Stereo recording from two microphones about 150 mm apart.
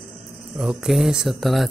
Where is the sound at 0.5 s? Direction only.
5° right (ahead or behind).